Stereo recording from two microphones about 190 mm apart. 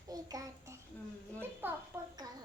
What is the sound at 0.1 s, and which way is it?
Child singing, 20° right (ahead or behind).